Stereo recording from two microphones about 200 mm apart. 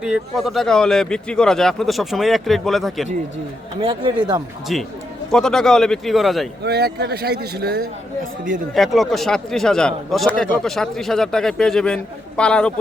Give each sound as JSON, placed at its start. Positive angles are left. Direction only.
{"t": 0.0, "sound": "a man's voice", "side_deg": 0}
{"t": 3.8, "sound": "speech", "side_deg": -25}
{"t": 4.7, "sound": "a man's voice", "side_deg": 0}
{"t": 6.7, "sound": "speech", "side_deg": -55}
{"t": 8.7, "sound": "a man's voice", "side_deg": 0}